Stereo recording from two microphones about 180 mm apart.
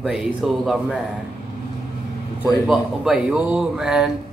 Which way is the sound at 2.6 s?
5° right (ahead or behind).